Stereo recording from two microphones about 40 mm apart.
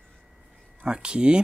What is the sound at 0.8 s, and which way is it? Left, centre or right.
Speech, right.